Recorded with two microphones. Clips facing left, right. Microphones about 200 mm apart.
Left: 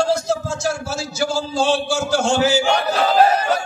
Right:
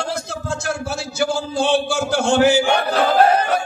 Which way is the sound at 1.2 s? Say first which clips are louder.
Even; 60° right (ahead or behind).